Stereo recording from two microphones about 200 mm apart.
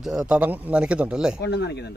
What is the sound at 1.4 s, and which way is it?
Speech, 55° left (ahead or behind).